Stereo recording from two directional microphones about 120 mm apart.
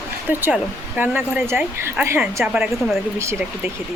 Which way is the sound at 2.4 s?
5° right (ahead or behind).